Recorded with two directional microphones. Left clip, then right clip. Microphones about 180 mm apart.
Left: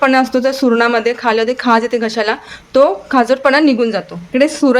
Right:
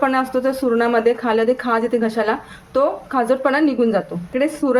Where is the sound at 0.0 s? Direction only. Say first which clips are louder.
Left 6 dB; 50° left (ahead or behind).